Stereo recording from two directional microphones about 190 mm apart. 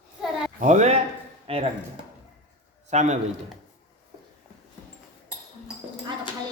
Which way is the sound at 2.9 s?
35° right (ahead or behind).